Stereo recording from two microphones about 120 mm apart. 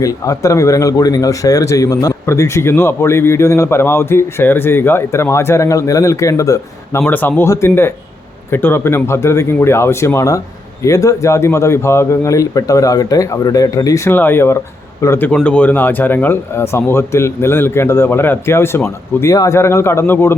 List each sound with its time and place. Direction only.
0.0 s speech: 25° left (ahead or behind)
7.0 s speech: 15° left (ahead or behind)